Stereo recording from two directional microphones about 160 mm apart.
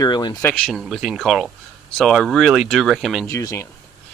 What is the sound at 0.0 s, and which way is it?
Speech, 25° left (ahead or behind).